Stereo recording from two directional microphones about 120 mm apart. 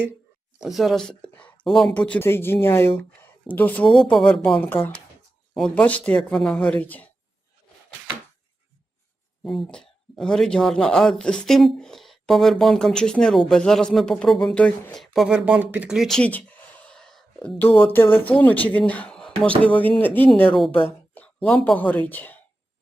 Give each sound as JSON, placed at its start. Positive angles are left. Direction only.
{"t": 0.6, "sound": "speech", "side_deg": 0}
{"t": 3.8, "sound": "speech", "side_deg": 0}
{"t": 5.5, "sound": "speech", "side_deg": 10}
{"t": 9.4, "sound": "speech", "side_deg": 5}
{"t": 17.7, "sound": "speech", "side_deg": 15}
{"t": 21.2, "sound": "a sound", "side_deg": 15}
{"t": 21.8, "sound": "speech", "side_deg": 15}